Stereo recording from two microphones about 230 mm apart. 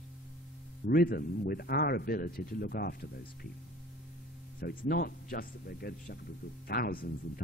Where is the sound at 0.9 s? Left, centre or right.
Left.